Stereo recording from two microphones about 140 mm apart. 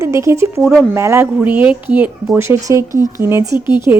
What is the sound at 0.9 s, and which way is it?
A woman's voice, 20° right (ahead or behind).